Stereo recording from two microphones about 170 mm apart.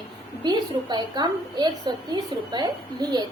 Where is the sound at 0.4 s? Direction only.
25° right (ahead or behind).